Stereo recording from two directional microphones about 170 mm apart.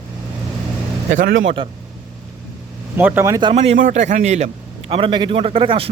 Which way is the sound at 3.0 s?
10° right (ahead or behind).